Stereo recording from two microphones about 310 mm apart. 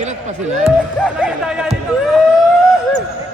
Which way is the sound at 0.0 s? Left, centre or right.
Right.